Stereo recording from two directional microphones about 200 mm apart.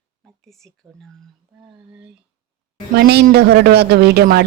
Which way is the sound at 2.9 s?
55° right (ahead or behind).